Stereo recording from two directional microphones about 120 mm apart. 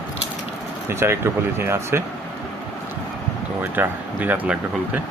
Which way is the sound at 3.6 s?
15° right (ahead or behind).